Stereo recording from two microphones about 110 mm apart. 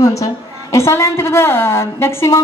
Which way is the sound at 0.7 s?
25° left (ahead or behind).